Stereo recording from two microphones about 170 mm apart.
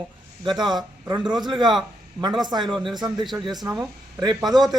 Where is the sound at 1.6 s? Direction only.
25° right (ahead or behind).